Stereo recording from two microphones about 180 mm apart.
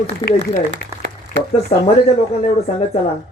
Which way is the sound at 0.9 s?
15° right (ahead or behind).